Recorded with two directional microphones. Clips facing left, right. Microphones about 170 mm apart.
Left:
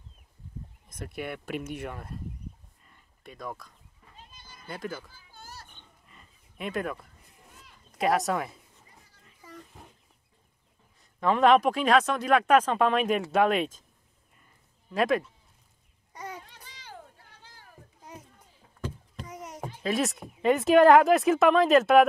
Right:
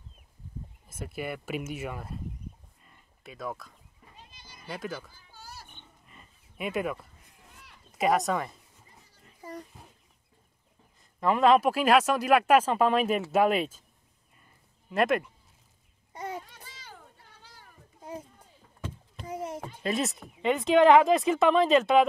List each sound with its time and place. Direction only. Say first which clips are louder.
0.8 s speech: right 1 dB; 5° right (ahead or behind)
3.3 s speech: right 2 dB; centre (ahead or behind)
4.4 s cat: left 1 dB; 15° right (ahead or behind)
4.6 s speech: even; centre (ahead or behind)
5.5 s pig: right 1 dB; 10° right (ahead or behind)
6.6 s speech: right 1 dB; 5° right (ahead or behind)
11.0 s speech: left 1 dB; 5° right (ahead or behind)
14.9 s speech: even; centre (ahead or behind)
16.1 s babbling: right 4 dB; 25° right (ahead or behind)
19.2 s a sound: right 8 dB; 30° right (ahead or behind)
19.8 s speech: left 2 dB; centre (ahead or behind)